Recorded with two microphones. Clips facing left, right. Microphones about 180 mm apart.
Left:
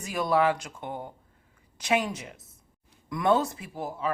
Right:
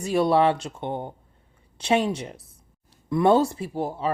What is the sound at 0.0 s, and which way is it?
Speech, 30° right (ahead or behind).